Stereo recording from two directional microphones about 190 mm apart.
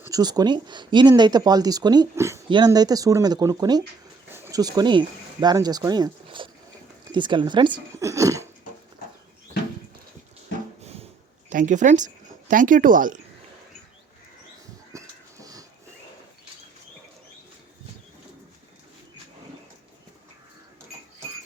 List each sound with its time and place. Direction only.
0.0 s speech: 20° right (ahead or behind)
10.8 s a sound: 35° right (ahead or behind)
14.9 s wheeze: 20° right (ahead or behind)